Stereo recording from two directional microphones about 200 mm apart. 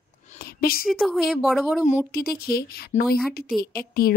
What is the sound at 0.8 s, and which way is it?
Speech, centre (ahead or behind).